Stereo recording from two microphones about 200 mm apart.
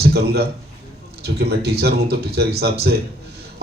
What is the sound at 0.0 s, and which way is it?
A man's voice, 55° right (ahead or behind).